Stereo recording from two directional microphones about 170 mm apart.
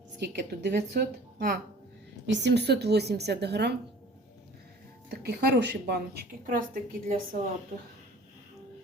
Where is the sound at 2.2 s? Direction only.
90° right.